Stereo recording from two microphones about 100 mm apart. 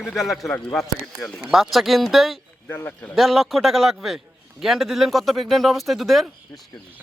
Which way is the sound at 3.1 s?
Centre (ahead or behind).